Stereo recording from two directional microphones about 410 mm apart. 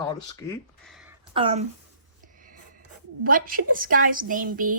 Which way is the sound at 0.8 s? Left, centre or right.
Centre.